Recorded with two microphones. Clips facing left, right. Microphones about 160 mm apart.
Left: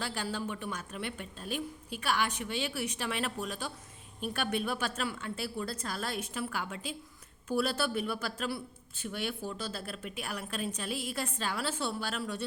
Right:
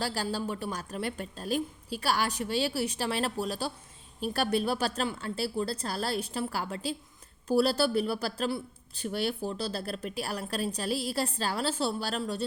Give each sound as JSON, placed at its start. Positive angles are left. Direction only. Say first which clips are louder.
{"t": 0.0, "sound": "a woman's voice", "louder": "right 4 dB", "side_deg": -35}